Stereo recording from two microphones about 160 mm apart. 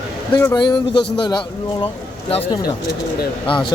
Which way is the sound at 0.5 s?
30° left (ahead or behind).